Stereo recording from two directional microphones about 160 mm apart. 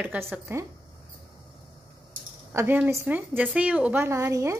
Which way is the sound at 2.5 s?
10° right (ahead or behind).